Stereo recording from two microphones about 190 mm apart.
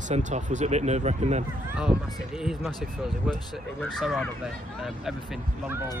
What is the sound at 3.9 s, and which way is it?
Speech, centre (ahead or behind).